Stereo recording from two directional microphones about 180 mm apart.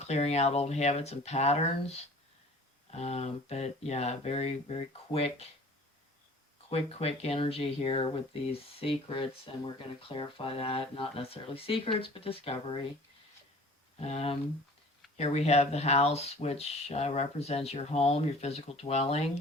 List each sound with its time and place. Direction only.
0.0 s speech: 35° left (ahead or behind)
6.7 s speech: 35° left (ahead or behind)
14.0 s speech: 35° left (ahead or behind)